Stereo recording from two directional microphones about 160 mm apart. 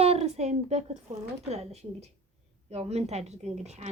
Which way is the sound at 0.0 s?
40° right (ahead or behind).